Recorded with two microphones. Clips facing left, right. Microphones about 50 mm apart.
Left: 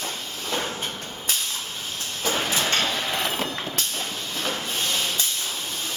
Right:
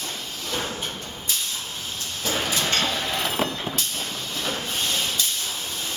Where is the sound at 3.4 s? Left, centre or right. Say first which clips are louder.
Right 2 dB; centre.